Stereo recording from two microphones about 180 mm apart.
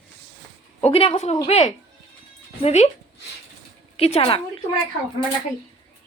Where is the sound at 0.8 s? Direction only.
30° left (ahead or behind).